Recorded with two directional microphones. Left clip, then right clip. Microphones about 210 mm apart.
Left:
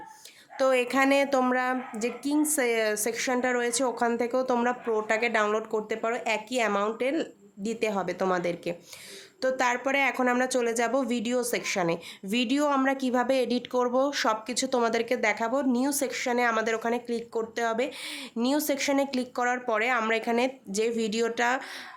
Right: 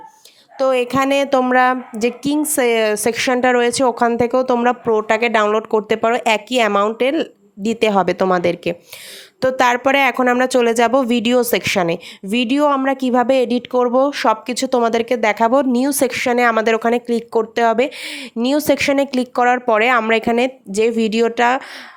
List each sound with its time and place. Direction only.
0.6 s speech: 30° right (ahead or behind)